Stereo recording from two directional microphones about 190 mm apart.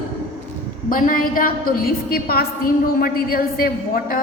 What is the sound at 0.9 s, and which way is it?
A woman's voice, 45° left (ahead or behind).